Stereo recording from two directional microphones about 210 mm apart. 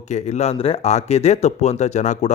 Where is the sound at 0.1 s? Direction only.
30° left (ahead or behind).